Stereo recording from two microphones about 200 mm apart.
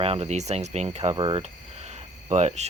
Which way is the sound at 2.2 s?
35° right (ahead or behind).